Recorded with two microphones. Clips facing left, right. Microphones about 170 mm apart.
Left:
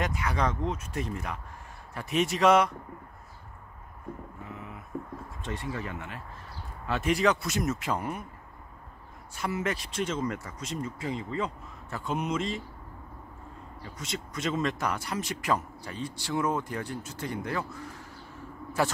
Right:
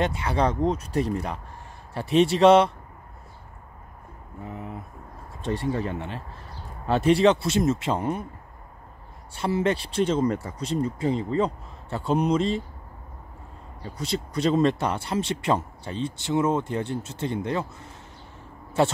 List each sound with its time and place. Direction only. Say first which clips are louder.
0.0 s speech: right 5 dB; 30° right (ahead or behind)
5.4 s speech: right 9 dB; 35° right (ahead or behind)
9.3 s speech: right 7 dB; 30° right (ahead or behind)
13.8 s speech: right 8 dB; 35° right (ahead or behind)